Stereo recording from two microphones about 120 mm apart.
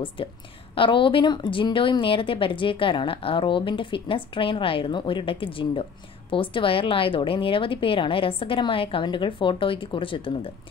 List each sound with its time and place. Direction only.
0.2 s speech: 45° left (ahead or behind)